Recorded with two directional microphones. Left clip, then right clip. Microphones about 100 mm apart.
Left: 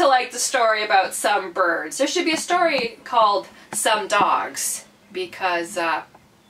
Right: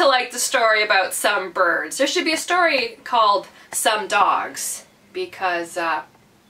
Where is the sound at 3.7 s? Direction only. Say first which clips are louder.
Even; 20° right (ahead or behind); by 6.0 s 5° right (ahead or behind).